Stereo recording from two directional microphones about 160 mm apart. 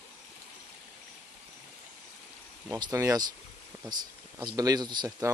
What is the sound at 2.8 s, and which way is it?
Speech, 20° right (ahead or behind).